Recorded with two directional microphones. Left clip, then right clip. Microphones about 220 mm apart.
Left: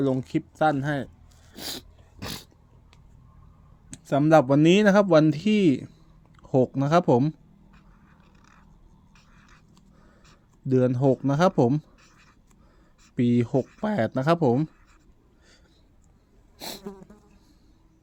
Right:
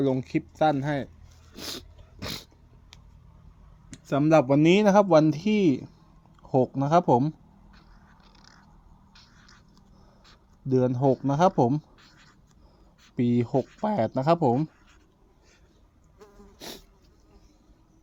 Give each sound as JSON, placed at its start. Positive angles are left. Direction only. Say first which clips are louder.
{"t": 0.0, "sound": "speech", "louder": "even", "side_deg": 10}
{"t": 1.5, "sound": "a sound", "louder": "left 1 dB", "side_deg": 15}
{"t": 3.9, "sound": "speech", "louder": "left 2 dB", "side_deg": 15}
{"t": 6.3, "sound": "a sound", "louder": "left 1 dB", "side_deg": 20}
{"t": 10.7, "sound": "speech", "louder": "left 1 dB", "side_deg": 20}
{"t": 13.1, "sound": "speech", "louder": "left 2 dB", "side_deg": 15}
{"t": 13.5, "sound": "speech", "louder": "left 1 dB", "side_deg": 0}
{"t": 13.8, "sound": "speech", "louder": "right 1 dB", "side_deg": 15}
{"t": 16.6, "sound": "insect", "louder": "left 4 dB", "side_deg": 25}